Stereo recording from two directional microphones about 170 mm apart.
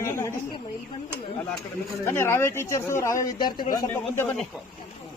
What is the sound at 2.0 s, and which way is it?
A woman's voice, 15° left (ahead or behind).